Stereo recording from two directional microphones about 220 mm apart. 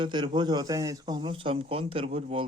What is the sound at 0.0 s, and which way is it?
Speech, 20° right (ahead or behind).